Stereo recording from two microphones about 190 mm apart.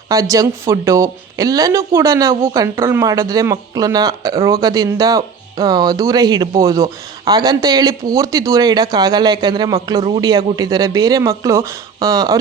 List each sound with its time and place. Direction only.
0.1 s a woman's voice: 15° right (ahead or behind)